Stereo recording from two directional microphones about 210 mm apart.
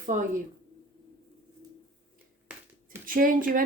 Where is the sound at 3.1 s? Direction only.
40° right (ahead or behind).